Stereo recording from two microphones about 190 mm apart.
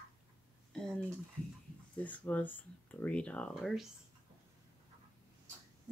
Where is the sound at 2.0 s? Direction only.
10° left (ahead or behind).